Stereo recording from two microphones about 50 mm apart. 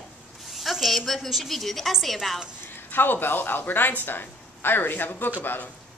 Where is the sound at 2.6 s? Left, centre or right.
Left.